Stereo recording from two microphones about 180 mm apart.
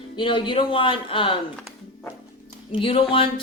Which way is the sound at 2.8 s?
30° left (ahead or behind).